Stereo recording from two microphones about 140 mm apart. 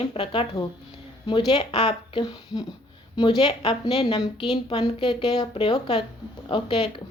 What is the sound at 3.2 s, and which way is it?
Speech, 35° left (ahead or behind).